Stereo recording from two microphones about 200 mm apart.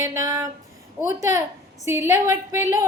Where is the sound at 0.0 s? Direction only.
15° right (ahead or behind).